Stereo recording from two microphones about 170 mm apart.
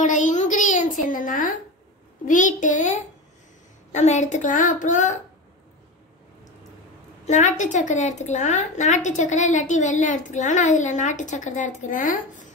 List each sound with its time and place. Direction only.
0.0 s a sound: 45° left (ahead or behind)
2.2 s a woman's voice: 50° left (ahead or behind)
7.2 s a woman's voice: 45° left (ahead or behind)